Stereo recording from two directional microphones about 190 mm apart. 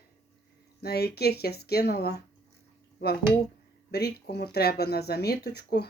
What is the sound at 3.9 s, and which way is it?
Speech, 55° left (ahead or behind).